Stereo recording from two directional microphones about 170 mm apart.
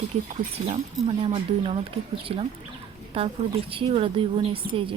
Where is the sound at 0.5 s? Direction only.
35° right (ahead or behind).